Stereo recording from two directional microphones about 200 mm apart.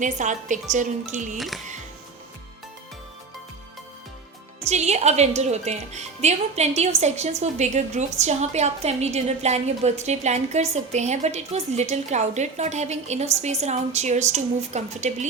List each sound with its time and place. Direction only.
0.0 s a woman's voice: 40° right (ahead or behind)
1.4 s speech: centre (ahead or behind)
4.6 s a woman's voice: 35° right (ahead or behind)